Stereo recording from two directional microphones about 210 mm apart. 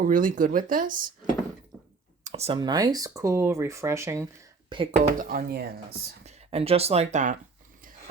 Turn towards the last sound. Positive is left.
turn(degrees=-35)  # may be behind; listen again after turning